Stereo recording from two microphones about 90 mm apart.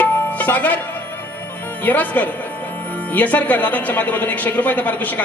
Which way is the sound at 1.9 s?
20° left (ahead or behind).